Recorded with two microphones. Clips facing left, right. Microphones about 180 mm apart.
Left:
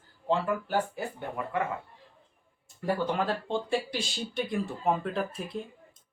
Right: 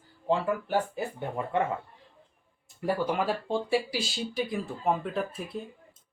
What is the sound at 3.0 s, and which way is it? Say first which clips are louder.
Speech: right 1 dB; 10° right (ahead or behind).